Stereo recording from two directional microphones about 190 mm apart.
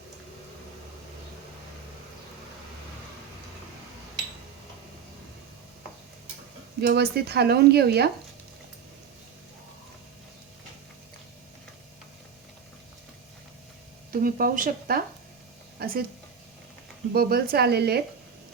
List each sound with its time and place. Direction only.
6.8 s speech: 60° right (ahead or behind)
14.1 s speech: 50° right (ahead or behind)
17.2 s speech: 55° right (ahead or behind)